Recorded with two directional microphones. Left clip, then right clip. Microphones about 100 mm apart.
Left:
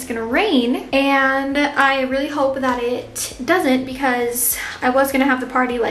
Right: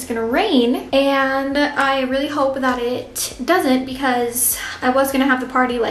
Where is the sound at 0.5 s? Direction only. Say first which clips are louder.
Right 2 dB; centre (ahead or behind).